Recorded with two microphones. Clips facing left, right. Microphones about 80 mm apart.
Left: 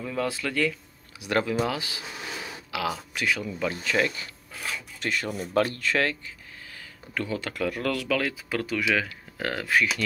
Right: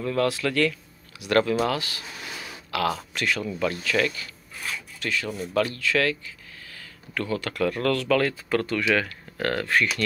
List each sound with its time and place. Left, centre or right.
0.0 s speech: centre
1.2 s speech: centre
3.7 s speech: left
5.0 s speech: left
6.7 s a sound: centre
7.6 s speech: centre